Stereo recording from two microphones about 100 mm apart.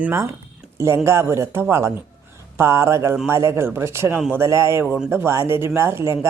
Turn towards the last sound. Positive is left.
turn(degrees=-25)  # may be behind; listen again after turning